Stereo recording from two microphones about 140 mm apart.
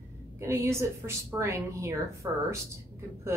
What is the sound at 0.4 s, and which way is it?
A woman's voice, 20° right (ahead or behind).